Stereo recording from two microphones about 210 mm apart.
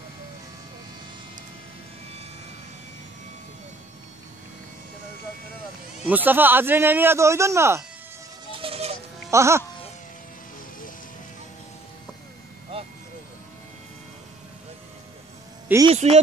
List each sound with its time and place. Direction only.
6.0 s a man's voice: 10° right (ahead or behind)
8.5 s goat: 25° right (ahead or behind)
9.3 s a man's voice: 15° right (ahead or behind)
12.7 s vehicle: 25° right (ahead or behind)
15.9 s speech: 30° right (ahead or behind)